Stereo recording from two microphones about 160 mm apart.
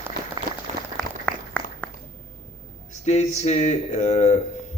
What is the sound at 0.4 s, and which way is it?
Applause, 30° right (ahead or behind).